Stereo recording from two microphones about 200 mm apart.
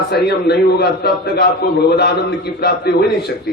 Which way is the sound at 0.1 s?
55° left (ahead or behind).